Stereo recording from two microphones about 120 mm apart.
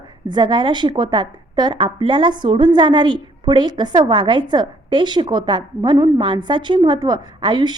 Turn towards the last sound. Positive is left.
turn(degrees=-40)  # may be behind; listen again after turning